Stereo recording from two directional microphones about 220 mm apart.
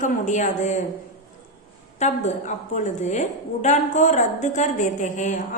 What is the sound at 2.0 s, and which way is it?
A woman's voice, 30° left (ahead or behind).